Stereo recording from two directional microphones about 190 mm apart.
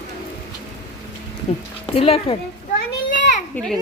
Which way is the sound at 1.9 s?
30° left (ahead or behind).